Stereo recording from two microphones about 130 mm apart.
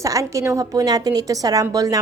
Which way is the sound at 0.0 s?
25° right (ahead or behind).